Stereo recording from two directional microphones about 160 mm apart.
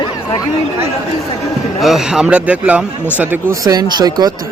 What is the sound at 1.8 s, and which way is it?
A man's voice, 5° right (ahead or behind).